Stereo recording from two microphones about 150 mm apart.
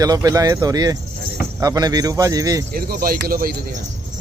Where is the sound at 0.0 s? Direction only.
25° right (ahead or behind).